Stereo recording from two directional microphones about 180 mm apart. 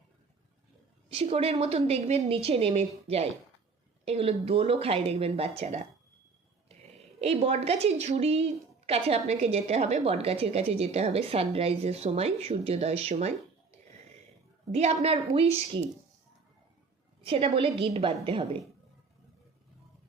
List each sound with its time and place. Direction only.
1.1 s a woman's voice: 35° right (ahead or behind)
7.2 s a woman's voice: 35° right (ahead or behind)
17.2 s a woman's voice: 30° right (ahead or behind)